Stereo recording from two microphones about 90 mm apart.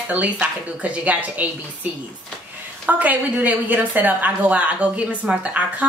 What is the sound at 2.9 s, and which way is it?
Speech, 20° right (ahead or behind).